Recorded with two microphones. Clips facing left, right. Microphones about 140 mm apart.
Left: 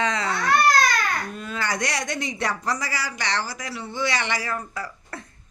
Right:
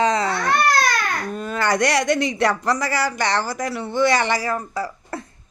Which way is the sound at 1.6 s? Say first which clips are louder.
Right 8 dB; 65° right (ahead or behind).